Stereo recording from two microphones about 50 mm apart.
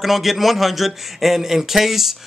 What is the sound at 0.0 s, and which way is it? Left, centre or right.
A man's voice, centre.